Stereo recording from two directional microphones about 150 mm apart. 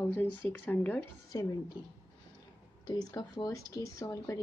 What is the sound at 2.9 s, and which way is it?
Speech, 25° left (ahead or behind).